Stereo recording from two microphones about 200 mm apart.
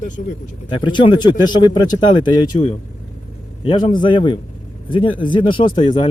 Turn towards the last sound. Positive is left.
turn(degrees=25)  # may be behind; listen again after turning